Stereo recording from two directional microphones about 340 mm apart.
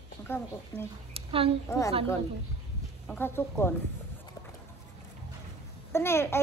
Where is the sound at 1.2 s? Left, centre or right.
Centre.